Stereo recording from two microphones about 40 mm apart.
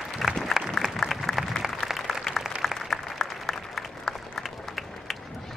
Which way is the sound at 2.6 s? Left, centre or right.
Centre.